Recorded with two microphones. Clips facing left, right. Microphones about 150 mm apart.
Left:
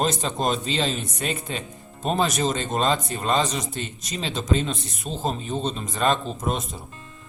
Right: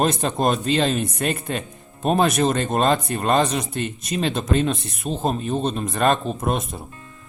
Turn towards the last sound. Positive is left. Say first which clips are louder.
# right 4 dB
turn(degrees=-55)  # may be behind; listen again after turning